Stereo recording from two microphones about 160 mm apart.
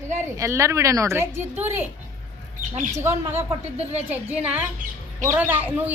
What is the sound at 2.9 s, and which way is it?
A woman's voice, 15° right (ahead or behind).